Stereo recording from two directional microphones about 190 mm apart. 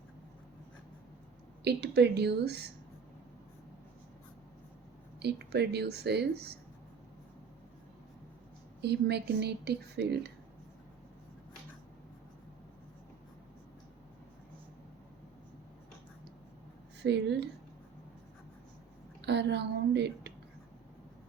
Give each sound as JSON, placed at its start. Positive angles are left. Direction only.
{"t": 1.6, "sound": "speech", "side_deg": -60}
{"t": 5.2, "sound": "speech", "side_deg": -60}
{"t": 8.8, "sound": "speech", "side_deg": -60}
{"t": 17.0, "sound": "speech", "side_deg": -65}
{"t": 19.2, "sound": "speech", "side_deg": -65}